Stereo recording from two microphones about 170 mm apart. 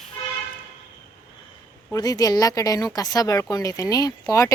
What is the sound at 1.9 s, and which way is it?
Speech, 20° left (ahead or behind).